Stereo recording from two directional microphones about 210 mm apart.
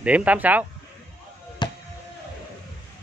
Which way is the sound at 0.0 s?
5° right (ahead or behind).